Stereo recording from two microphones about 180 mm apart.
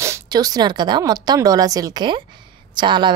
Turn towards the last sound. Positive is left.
turn(degrees=-25)  # may be behind; listen again after turning